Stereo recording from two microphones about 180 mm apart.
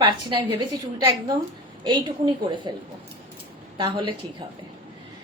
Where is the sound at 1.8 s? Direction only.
25° right (ahead or behind).